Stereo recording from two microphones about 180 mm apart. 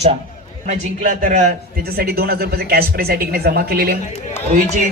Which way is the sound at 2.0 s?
60° right (ahead or behind).